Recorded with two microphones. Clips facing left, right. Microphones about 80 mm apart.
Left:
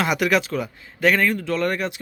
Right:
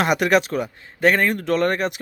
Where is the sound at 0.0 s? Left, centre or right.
Right.